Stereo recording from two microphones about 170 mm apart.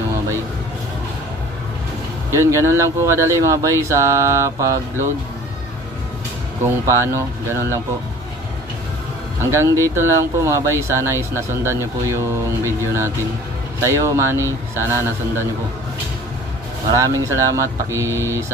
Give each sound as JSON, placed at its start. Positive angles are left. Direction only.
{"t": 2.3, "sound": "speech", "side_deg": -15}
{"t": 6.6, "sound": "speech", "side_deg": -15}
{"t": 9.5, "sound": "speech", "side_deg": -15}
{"t": 16.9, "sound": "speech", "side_deg": -20}